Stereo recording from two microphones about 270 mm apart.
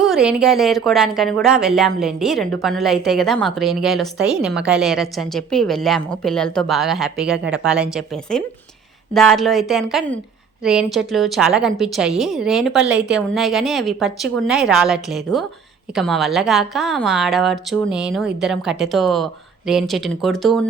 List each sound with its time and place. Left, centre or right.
0.0 s a woman's voice: centre